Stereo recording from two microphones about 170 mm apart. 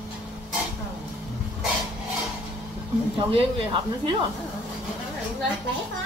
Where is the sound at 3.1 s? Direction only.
30° right (ahead or behind).